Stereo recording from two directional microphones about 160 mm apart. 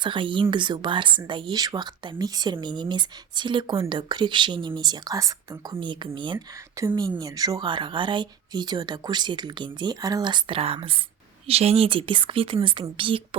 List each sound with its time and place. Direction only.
0.0 s speech: 30° right (ahead or behind)